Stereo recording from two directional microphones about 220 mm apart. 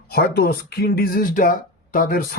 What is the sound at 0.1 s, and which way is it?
Speech, 45° left (ahead or behind).